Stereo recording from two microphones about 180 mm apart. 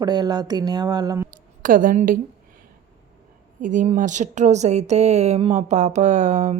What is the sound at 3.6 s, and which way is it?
Speech, 45° right (ahead or behind).